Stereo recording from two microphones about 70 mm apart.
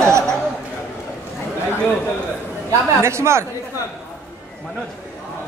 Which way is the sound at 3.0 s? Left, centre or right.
Right.